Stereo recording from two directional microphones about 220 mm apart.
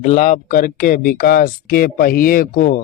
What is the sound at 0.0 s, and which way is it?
Speech, 35° left (ahead or behind).